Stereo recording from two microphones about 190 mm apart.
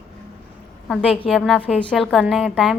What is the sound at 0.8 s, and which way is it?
A woman's voice, centre (ahead or behind).